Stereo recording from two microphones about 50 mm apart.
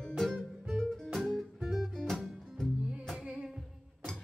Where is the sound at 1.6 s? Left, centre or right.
Centre.